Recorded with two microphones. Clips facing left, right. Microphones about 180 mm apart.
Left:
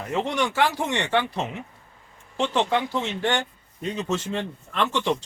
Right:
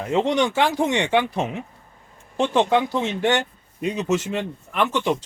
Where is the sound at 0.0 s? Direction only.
20° right (ahead or behind).